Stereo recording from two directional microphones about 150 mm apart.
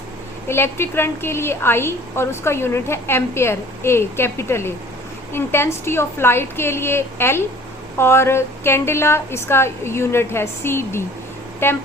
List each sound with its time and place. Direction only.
0.4 s a woman's voice: 15° left (ahead or behind)